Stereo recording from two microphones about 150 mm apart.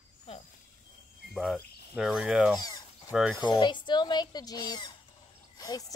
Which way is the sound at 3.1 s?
5° right (ahead or behind).